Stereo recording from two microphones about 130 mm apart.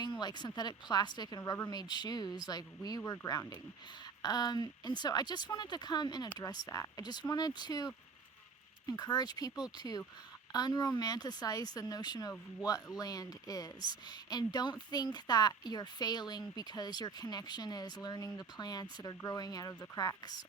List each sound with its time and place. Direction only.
0.0 s a woman's voice: 35° left (ahead or behind)